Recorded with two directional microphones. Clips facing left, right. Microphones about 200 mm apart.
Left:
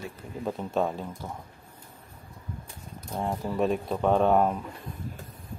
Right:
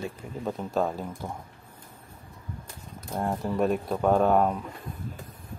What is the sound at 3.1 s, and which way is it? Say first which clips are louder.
Speech: right 1 dB; centre (ahead or behind).